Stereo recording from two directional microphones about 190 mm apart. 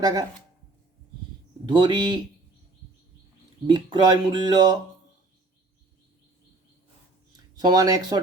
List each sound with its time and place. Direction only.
0.0 s speech: 20° right (ahead or behind)
1.6 s speech: 25° right (ahead or behind)
3.7 s speech: 20° right (ahead or behind)
7.5 s speech: 20° right (ahead or behind)